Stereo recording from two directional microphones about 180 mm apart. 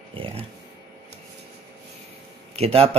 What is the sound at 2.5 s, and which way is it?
Speech, 35° right (ahead or behind).